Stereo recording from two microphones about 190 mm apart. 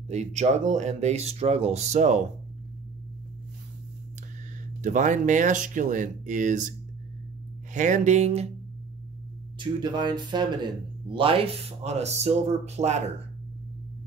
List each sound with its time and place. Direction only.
0.1 s speech: 35° right (ahead or behind)
4.8 s speech: 40° right (ahead or behind)
7.7 s speech: 40° right (ahead or behind)
9.6 s speech: 25° right (ahead or behind)